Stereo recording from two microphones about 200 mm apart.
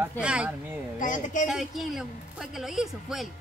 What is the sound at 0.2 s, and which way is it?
Speech, 5° right (ahead or behind).